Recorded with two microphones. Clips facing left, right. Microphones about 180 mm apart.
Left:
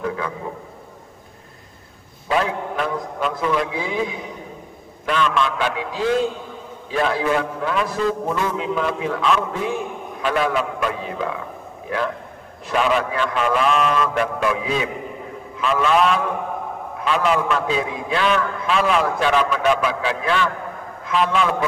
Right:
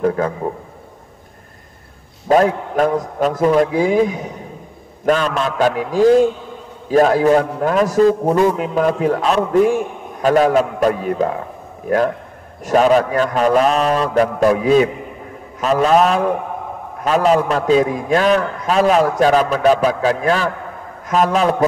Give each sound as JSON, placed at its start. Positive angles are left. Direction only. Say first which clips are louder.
{"t": 0.0, "sound": "a man's voice", "louder": "right 8 dB", "side_deg": -45}
{"t": 2.2, "sound": "a man's voice", "louder": "right 8 dB", "side_deg": -45}
{"t": 12.6, "sound": "a man's voice", "louder": "right 7 dB", "side_deg": -40}